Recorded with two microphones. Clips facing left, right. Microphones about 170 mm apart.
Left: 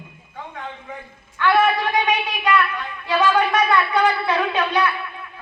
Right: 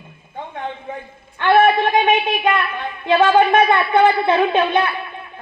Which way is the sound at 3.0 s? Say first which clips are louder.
Right 5 dB; 25° right (ahead or behind).